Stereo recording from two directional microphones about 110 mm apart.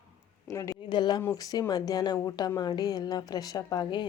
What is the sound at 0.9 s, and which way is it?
A woman's voice, 40° left (ahead or behind).